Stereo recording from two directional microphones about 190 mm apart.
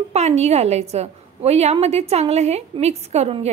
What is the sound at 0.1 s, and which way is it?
A woman's voice, 35° right (ahead or behind).